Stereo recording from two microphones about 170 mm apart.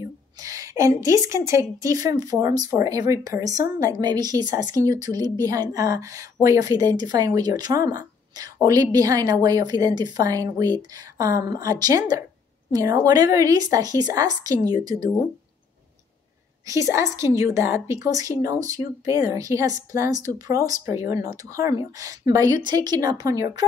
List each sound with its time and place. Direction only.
0.0 s a woman's voice: 20° right (ahead or behind)
16.6 s a woman's voice: 20° right (ahead or behind)